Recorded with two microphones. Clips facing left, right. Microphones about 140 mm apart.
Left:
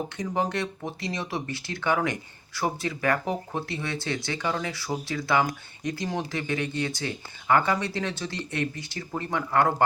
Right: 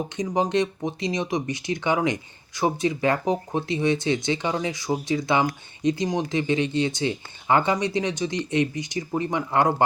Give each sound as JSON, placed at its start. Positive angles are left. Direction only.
{"t": 0.2, "sound": "speech", "side_deg": -20}